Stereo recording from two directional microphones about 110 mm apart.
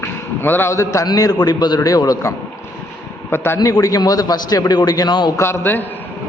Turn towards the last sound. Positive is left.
turn(degrees=20)  # may be behind; listen again after turning